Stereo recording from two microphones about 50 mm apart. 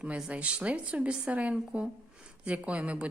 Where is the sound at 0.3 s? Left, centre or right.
Right.